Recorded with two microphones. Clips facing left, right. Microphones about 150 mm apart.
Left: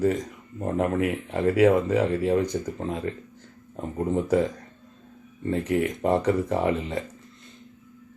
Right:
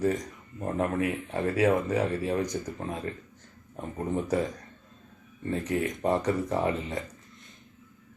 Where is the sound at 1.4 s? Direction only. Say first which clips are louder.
Left 6 dB; 25° left (ahead or behind).